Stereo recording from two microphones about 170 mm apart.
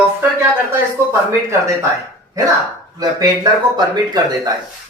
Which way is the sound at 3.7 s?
25° right (ahead or behind).